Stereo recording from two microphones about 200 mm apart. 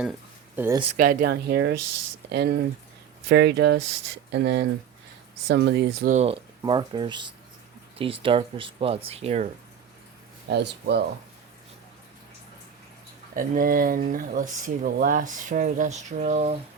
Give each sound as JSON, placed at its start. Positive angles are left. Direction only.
{"t": 0.5, "sound": "speech", "side_deg": -10}
{"t": 0.9, "sound": "speech", "side_deg": -50}
{"t": 6.1, "sound": "speech", "side_deg": -30}
{"t": 10.5, "sound": "speech", "side_deg": -55}
{"t": 13.3, "sound": "speech", "side_deg": -45}